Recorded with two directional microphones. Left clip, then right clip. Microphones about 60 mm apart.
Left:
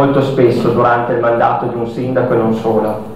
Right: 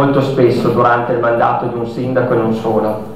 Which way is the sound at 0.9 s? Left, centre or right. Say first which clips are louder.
Left 1 dB; centre.